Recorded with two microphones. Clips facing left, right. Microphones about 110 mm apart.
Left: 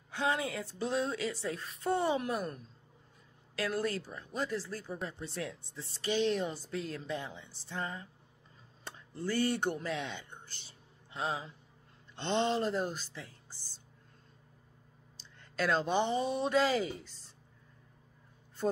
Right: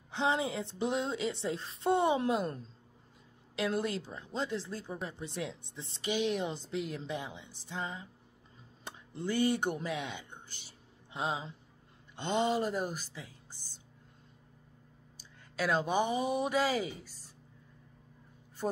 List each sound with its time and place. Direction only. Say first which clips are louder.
0.1 s a woman's voice: right 2 dB; 20° right (ahead or behind)
12.2 s a woman's voice: even; 10° right (ahead or behind)
15.1 s speech: left 1 dB; 10° right (ahead or behind)
18.6 s a man's voice: left 2 dB; 5° right (ahead or behind)